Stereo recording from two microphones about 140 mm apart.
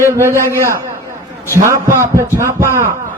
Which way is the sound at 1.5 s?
20° right (ahead or behind).